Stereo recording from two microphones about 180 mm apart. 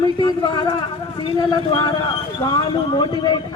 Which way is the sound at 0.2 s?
25° left (ahead or behind).